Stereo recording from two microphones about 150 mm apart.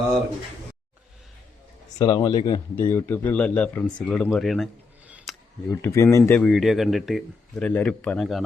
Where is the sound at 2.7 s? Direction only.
15° left (ahead or behind).